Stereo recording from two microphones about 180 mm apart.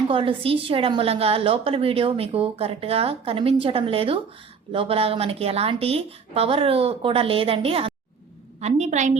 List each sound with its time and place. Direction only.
0.1 s a woman's voice: 30° right (ahead or behind)